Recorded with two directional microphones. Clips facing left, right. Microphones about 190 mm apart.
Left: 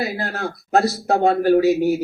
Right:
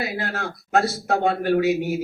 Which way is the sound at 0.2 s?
40° left (ahead or behind).